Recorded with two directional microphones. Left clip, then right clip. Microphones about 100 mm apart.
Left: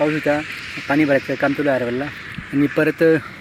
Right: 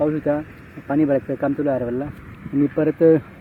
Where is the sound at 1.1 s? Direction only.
15° left (ahead or behind).